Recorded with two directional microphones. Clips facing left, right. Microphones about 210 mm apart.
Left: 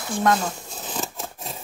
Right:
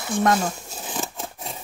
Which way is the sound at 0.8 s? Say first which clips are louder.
Even; centre (ahead or behind).